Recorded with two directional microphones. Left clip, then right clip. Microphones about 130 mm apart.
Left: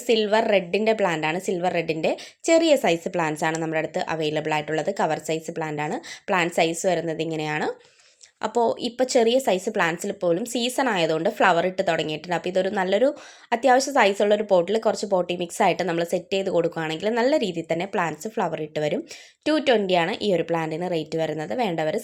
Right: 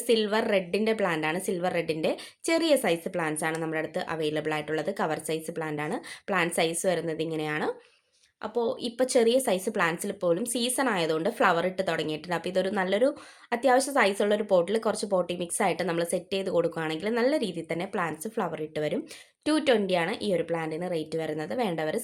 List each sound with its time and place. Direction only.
0.1 s a woman's voice: 15° left (ahead or behind)
8.4 s speech: 55° left (ahead or behind)
9.0 s a woman's voice: 15° left (ahead or behind)